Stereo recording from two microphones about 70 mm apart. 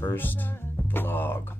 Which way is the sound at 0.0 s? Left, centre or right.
Left.